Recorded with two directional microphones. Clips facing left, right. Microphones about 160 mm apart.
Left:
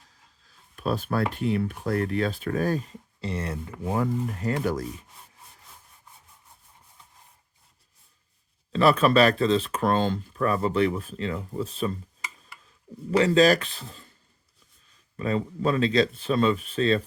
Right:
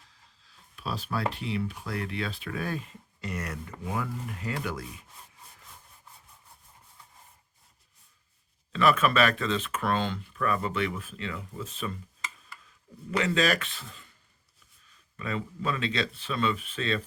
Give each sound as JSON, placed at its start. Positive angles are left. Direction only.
{"t": 0.1, "sound": "speech", "side_deg": 45}
{"t": 8.7, "sound": "speech", "side_deg": 35}
{"t": 13.1, "sound": "speech", "side_deg": 35}
{"t": 15.1, "sound": "speech", "side_deg": 35}